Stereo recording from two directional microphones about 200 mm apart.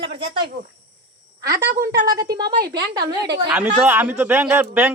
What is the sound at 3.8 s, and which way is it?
A man's voice, 10° right (ahead or behind).